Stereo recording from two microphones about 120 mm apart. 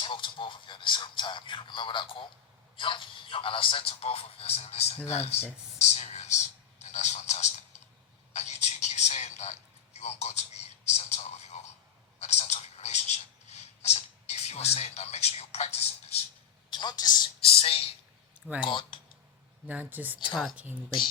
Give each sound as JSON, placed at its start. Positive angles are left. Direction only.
{"t": 0.0, "sound": "a man's voice", "side_deg": 45}
{"t": 16.6, "sound": "a woman's voice", "side_deg": 40}
{"t": 17.4, "sound": "speech", "side_deg": 55}
{"t": 19.6, "sound": "speech", "side_deg": -15}